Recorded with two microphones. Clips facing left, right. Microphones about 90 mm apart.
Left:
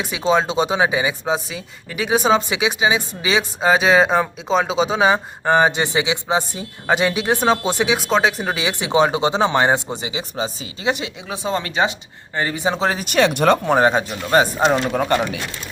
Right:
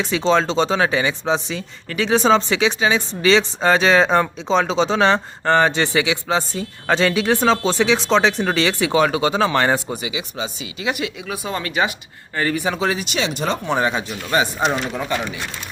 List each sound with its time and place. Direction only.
0.0 s speech: 10° left (ahead or behind); by 14.8 s 40° left (ahead or behind)
14.9 s speech: 55° left (ahead or behind); by 15.4 s 75° left (ahead or behind)